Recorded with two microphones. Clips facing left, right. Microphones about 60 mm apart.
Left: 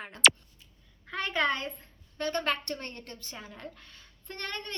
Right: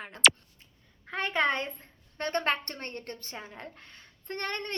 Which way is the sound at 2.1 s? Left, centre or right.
Right.